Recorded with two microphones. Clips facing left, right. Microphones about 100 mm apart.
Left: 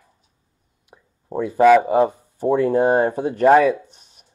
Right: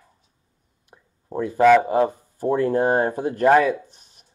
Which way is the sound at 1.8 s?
20° left (ahead or behind).